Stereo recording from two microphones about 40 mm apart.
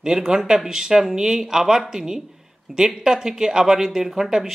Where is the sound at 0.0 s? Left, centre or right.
Centre.